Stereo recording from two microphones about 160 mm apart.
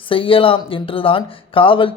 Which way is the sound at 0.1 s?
35° left (ahead or behind).